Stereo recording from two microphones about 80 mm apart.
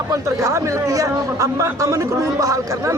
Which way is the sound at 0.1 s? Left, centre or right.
Right.